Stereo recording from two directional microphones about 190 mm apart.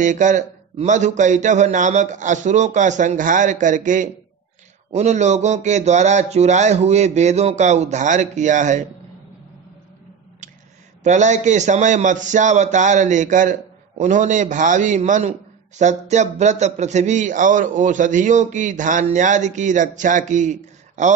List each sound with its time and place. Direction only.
0.0 s a man's voice: 40° right (ahead or behind)
11.1 s a man's voice: 40° right (ahead or behind)